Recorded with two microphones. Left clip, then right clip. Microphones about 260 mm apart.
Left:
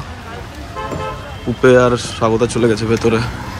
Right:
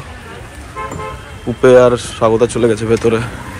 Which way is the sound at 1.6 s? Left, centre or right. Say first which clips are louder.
Right 3 dB; centre.